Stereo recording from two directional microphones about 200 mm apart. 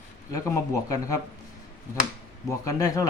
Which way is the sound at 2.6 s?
15° left (ahead or behind).